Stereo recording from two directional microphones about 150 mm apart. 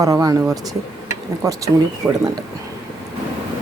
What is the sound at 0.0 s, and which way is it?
Speech, 25° right (ahead or behind).